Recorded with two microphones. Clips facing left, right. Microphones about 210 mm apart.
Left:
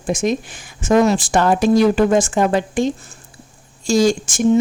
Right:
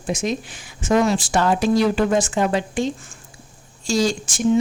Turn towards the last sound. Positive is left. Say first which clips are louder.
# left 5 dB
turn(degrees=45)  # may be behind; listen again after turning